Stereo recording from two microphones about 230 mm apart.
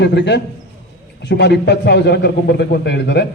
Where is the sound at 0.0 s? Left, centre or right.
Left.